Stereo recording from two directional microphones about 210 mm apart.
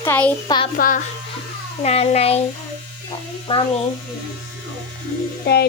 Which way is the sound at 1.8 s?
30° left (ahead or behind).